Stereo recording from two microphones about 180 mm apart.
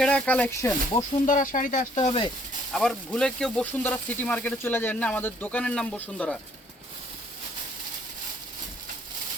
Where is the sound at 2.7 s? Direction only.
Centre (ahead or behind).